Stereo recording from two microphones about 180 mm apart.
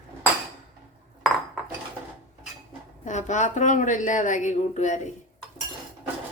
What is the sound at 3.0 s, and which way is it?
A woman's voice, 40° left (ahead or behind).